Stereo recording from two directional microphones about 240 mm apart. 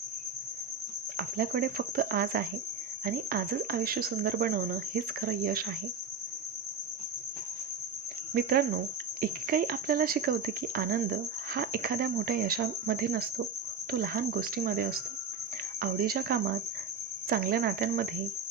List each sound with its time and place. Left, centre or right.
1.1 s speech: right
8.3 s speech: right